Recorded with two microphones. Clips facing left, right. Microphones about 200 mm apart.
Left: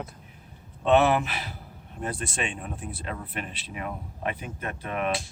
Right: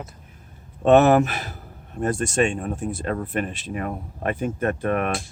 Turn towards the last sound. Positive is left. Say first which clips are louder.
# right 5 dB
turn(degrees=-55)  # may be behind; listen again after turning